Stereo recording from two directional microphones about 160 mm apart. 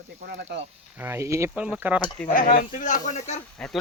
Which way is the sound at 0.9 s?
15° right (ahead or behind).